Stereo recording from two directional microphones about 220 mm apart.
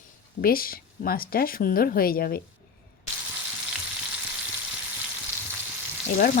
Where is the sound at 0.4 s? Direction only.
40° left (ahead or behind).